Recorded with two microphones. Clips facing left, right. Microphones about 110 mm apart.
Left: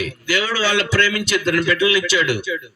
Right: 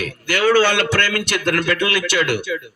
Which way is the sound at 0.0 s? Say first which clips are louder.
Right 3 dB; 55° right (ahead or behind).